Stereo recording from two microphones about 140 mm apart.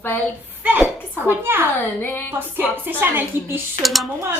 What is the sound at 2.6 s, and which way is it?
A woman's voice, 15° right (ahead or behind).